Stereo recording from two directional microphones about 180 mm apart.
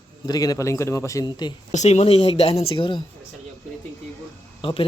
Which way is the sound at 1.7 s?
40° left (ahead or behind).